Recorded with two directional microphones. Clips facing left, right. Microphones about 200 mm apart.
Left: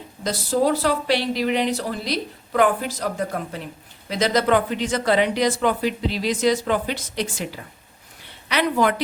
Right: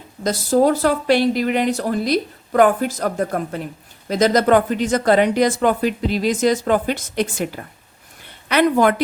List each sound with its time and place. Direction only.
0.3 s speech: 50° right (ahead or behind)